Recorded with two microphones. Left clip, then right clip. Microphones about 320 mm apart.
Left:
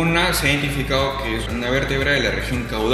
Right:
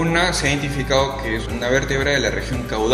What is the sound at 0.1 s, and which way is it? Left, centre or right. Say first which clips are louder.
A man's voice: even; right.